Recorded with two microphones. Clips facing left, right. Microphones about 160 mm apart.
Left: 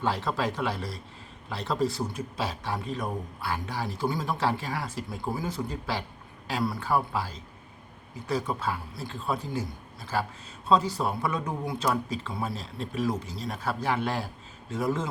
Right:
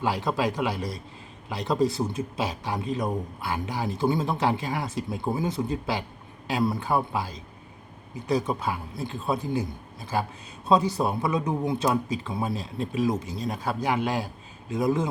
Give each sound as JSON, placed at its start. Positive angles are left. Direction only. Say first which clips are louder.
{"t": 0.0, "sound": "a man's voice", "louder": "right 3 dB", "side_deg": -10}